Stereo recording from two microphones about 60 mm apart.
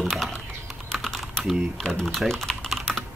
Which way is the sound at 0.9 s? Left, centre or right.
Centre.